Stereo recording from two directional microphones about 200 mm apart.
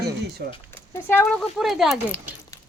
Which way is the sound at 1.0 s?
10° left (ahead or behind).